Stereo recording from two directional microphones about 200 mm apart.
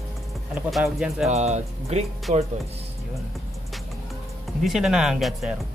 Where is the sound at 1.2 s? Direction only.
35° right (ahead or behind).